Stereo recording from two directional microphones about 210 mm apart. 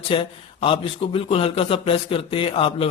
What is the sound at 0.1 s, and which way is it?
Speech, 25° left (ahead or behind).